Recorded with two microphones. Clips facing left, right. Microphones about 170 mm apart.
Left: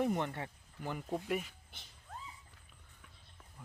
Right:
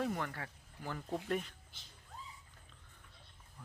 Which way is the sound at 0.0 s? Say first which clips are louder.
Left 4 dB; 20° left (ahead or behind).